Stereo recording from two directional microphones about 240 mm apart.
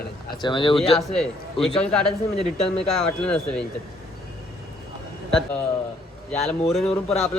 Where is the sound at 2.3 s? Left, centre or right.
Left.